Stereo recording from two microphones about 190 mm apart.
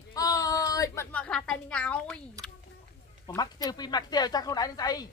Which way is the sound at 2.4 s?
20° right (ahead or behind).